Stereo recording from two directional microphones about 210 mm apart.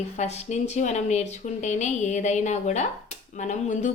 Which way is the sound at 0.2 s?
30° left (ahead or behind).